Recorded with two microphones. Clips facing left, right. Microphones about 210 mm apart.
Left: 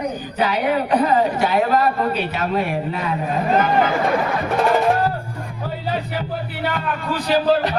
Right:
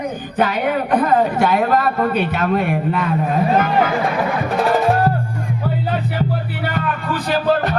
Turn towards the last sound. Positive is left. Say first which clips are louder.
# even
turn(degrees=-50)  # may be behind; listen again after turning